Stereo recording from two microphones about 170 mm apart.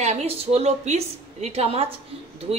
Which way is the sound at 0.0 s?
40° right (ahead or behind).